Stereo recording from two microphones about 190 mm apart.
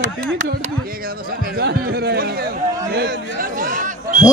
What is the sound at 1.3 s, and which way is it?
Speech, 50° right (ahead or behind).